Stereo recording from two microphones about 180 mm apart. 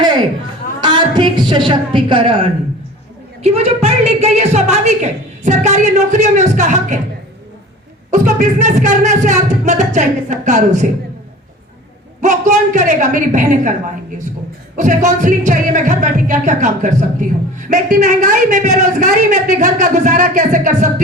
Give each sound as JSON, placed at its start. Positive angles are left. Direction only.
{"t": 0.8, "sound": "a woman's voice", "side_deg": -25}
{"t": 8.1, "sound": "speech", "side_deg": -45}
{"t": 12.2, "sound": "speech", "side_deg": -40}
{"t": 14.8, "sound": "speech", "side_deg": -45}